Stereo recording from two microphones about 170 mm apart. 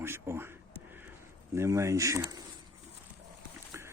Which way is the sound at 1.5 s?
15° right (ahead or behind).